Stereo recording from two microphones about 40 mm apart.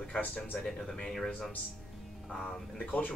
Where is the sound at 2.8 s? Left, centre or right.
Left.